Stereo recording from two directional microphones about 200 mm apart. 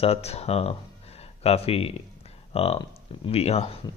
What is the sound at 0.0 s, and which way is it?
Speech, 30° left (ahead or behind).